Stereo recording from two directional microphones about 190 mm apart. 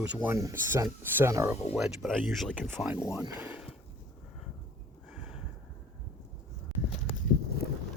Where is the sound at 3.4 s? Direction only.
10° right (ahead or behind).